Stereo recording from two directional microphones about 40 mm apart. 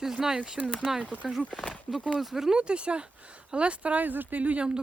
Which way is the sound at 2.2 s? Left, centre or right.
Centre.